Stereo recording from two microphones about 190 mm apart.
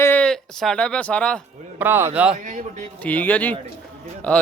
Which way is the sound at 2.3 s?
40° right (ahead or behind).